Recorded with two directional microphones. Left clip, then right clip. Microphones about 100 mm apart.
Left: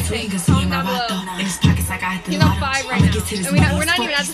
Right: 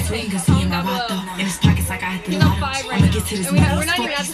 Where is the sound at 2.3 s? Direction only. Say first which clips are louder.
Left 2 dB; 15° left (ahead or behind).